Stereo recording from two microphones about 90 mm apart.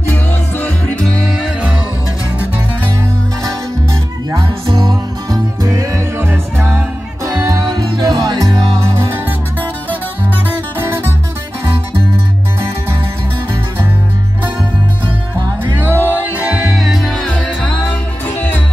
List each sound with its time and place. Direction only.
0.0 s music: 20° left (ahead or behind)
1.0 s music: 5° left (ahead or behind)
4.4 s music: 65° right (ahead or behind); by 6.8 s 25° right (ahead or behind)
7.2 s music: 40° right (ahead or behind)
8.9 s music: 30° right (ahead or behind)
15.9 s music: 20° right (ahead or behind)
16.7 s music: centre (ahead or behind); by 18.6 s 20° left (ahead or behind)